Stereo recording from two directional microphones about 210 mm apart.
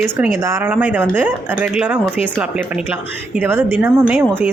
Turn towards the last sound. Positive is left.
turn(degrees=-10)  # may be behind; listen again after turning